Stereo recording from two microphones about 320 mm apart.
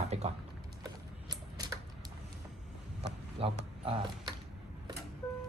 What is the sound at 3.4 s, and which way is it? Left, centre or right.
Speech, centre.